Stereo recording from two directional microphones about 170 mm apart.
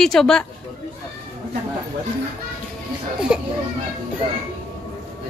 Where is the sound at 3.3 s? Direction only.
5° right (ahead or behind).